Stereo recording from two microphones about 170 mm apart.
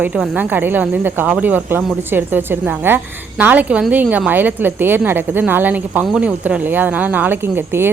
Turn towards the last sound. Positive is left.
turn(degrees=-15)  # may be behind; listen again after turning